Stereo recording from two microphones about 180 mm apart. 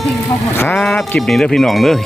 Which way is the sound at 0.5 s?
10° left (ahead or behind).